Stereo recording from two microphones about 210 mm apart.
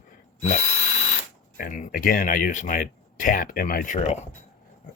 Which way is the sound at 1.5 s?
40° left (ahead or behind).